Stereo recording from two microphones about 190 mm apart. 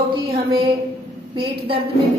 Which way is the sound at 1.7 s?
30° right (ahead or behind).